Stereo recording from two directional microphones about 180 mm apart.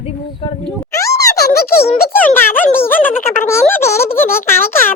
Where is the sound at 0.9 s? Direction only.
15° left (ahead or behind).